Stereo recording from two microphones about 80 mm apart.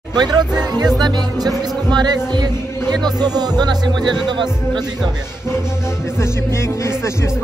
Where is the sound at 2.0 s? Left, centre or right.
Right.